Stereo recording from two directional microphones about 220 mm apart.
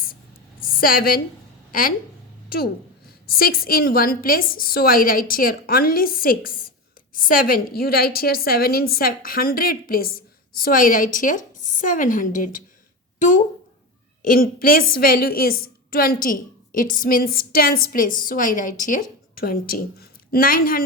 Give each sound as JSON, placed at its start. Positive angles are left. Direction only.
{"t": 0.6, "sound": "a woman's voice", "side_deg": 40}
{"t": 3.2, "sound": "a woman's voice", "side_deg": 45}